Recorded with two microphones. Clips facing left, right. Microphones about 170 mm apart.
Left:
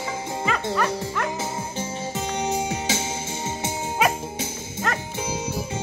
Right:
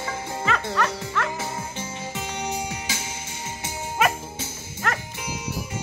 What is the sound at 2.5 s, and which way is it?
Music, 25° left (ahead or behind).